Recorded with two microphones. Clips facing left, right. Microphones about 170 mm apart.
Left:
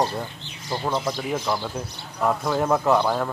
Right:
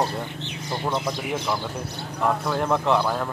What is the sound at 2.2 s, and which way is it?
A man's voice, 5° left (ahead or behind).